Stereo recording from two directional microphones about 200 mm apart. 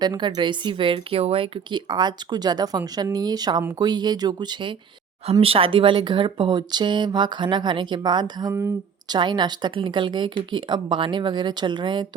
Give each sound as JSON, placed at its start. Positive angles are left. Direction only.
{"t": 0.0, "sound": "speech", "side_deg": -20}